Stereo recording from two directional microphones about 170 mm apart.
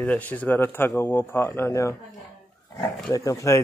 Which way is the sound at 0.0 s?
10° left (ahead or behind).